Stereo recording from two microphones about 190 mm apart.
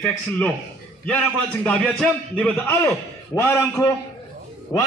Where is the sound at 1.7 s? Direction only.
5° left (ahead or behind).